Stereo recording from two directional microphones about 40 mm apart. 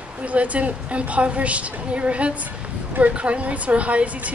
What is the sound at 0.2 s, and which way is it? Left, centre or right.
A woman's voice, right.